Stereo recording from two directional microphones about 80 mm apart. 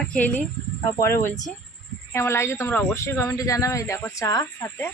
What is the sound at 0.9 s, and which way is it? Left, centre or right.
Speech, left.